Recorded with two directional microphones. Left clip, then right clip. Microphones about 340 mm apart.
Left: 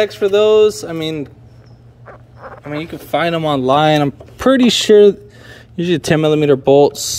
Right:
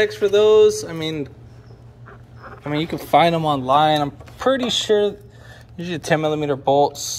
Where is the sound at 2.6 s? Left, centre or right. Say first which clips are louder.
Right 1 dB; centre.